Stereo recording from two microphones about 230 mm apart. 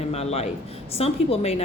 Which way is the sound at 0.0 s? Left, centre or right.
Left.